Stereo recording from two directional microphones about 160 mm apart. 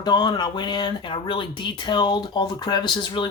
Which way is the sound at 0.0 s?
25° left (ahead or behind).